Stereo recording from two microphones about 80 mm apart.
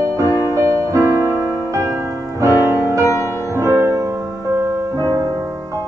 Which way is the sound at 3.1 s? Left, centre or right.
Left.